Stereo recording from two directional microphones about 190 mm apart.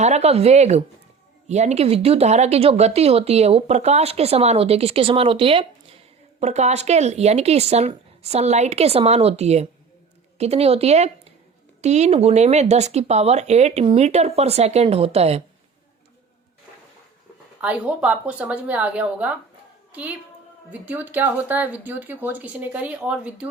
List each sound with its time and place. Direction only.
0.0 s speech: 35° right (ahead or behind)
17.6 s a woman's voice: 5° right (ahead or behind)